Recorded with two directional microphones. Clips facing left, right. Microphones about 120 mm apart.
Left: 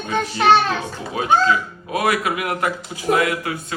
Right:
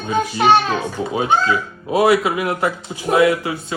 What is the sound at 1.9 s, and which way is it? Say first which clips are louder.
Speech: right 6 dB; 25° right (ahead or behind).